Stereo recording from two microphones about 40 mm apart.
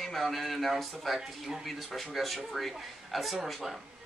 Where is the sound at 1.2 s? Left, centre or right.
Centre.